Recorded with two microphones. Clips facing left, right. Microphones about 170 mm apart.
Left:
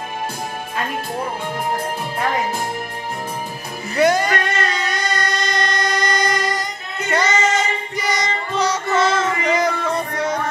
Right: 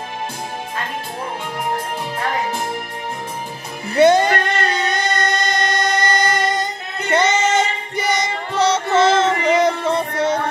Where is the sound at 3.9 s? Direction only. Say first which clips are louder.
Right 4 dB; 25° right (ahead or behind).